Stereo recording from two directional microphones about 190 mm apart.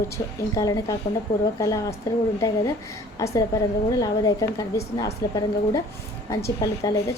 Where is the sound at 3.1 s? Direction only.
15° left (ahead or behind).